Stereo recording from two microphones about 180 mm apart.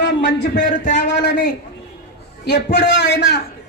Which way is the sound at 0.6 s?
45° left (ahead or behind).